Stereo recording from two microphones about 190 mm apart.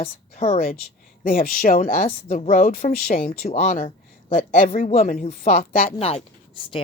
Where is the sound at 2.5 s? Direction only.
45° left (ahead or behind).